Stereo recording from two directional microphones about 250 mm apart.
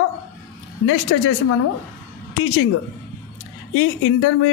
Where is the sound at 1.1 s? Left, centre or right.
Left.